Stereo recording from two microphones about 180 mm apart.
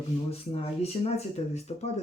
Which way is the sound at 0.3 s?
35° left (ahead or behind).